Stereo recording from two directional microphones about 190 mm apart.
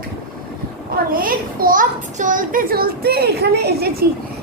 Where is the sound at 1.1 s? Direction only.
50° right (ahead or behind).